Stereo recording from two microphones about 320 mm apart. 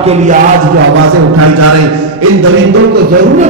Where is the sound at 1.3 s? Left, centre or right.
Right.